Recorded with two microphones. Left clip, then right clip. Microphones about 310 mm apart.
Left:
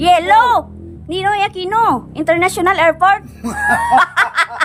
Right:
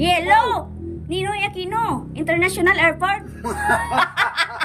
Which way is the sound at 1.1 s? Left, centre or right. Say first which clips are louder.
Left 8 dB; centre.